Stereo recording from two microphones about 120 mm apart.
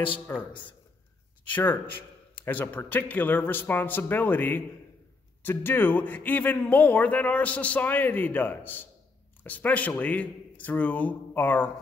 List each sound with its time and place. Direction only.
0.1 s a man's voice: 15° left (ahead or behind)